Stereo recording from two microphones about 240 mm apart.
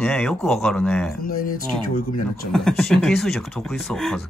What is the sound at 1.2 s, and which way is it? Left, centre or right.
Speech, left.